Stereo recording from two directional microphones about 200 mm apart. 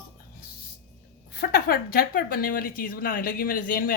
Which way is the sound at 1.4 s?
50° left (ahead or behind).